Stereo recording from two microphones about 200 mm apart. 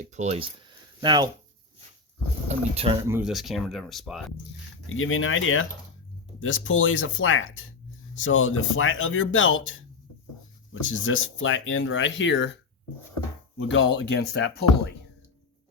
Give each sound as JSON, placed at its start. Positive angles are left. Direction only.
{"t": 0.0, "sound": "speech", "side_deg": -35}
{"t": 2.5, "sound": "speech", "side_deg": -30}
{"t": 3.0, "sound": "speech", "side_deg": -10}
{"t": 3.2, "sound": "speech", "side_deg": 0}
{"t": 4.9, "sound": "speech", "side_deg": 90}
{"t": 10.8, "sound": "speech", "side_deg": 80}
{"t": 13.6, "sound": "speech", "side_deg": 70}